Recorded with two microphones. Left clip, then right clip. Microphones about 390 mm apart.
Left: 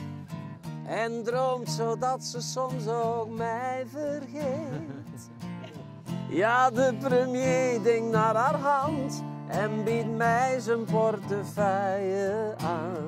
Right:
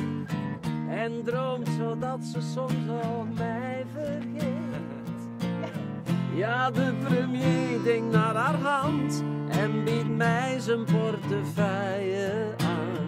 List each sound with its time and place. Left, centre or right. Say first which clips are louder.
0.9 s music: left 3 dB; centre
6.3 s music: left 5 dB; left
7.4 s music: left 2 dB; left